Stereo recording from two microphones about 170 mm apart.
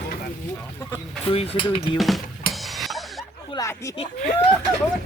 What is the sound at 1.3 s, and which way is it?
Cutlery, 35° left (ahead or behind).